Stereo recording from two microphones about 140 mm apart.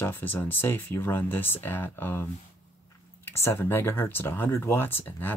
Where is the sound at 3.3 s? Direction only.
15° left (ahead or behind).